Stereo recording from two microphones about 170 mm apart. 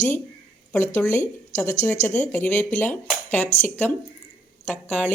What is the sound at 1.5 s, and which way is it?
Speech, 45° left (ahead or behind).